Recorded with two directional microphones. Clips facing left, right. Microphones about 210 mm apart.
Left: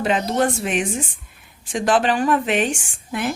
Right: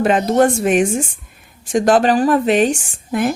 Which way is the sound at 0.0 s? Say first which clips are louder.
Right 6 dB; 50° right (ahead or behind).